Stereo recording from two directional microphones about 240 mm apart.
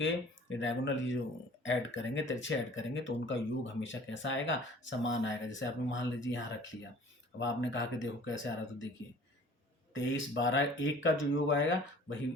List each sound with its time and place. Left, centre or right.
0.0 s speech: left
9.9 s speech: left